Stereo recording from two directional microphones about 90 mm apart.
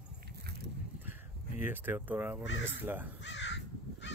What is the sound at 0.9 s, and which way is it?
Speech, 20° right (ahead or behind).